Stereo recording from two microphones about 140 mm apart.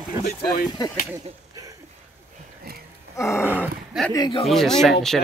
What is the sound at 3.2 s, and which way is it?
Speech, 20° left (ahead or behind).